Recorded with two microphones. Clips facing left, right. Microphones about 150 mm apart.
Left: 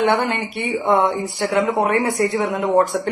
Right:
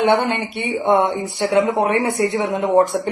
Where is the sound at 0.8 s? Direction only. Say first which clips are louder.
Right 1 dB; 20° right (ahead or behind).